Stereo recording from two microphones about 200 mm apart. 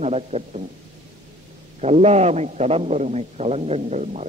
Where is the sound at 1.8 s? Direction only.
30° right (ahead or behind).